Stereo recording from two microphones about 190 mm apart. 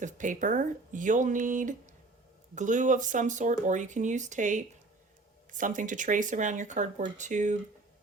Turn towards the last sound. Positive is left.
turn(degrees=-40)  # may be behind; listen again after turning